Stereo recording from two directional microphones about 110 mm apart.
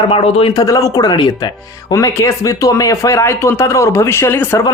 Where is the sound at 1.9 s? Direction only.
30° left (ahead or behind).